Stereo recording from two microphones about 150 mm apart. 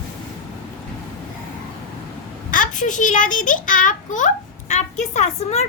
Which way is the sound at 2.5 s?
60° left (ahead or behind).